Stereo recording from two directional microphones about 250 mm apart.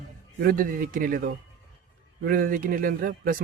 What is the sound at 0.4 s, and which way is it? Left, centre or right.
A man's voice, right.